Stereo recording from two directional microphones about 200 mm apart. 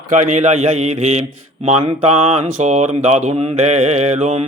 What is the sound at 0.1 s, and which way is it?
Speech, 35° right (ahead or behind).